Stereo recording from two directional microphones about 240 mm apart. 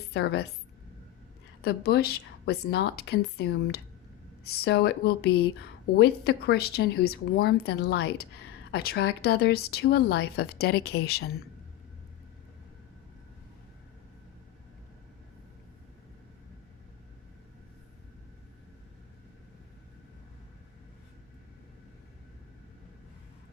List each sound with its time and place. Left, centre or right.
0.1 s a woman's voice: left
1.6 s a woman's voice: left